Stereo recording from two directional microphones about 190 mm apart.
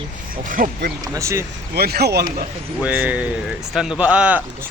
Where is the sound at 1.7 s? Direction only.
55° right (ahead or behind).